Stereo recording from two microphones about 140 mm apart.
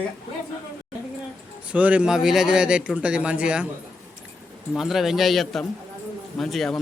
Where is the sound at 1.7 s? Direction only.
10° right (ahead or behind).